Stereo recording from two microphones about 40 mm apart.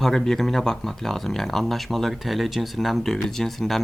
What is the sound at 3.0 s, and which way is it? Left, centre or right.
Speech, centre.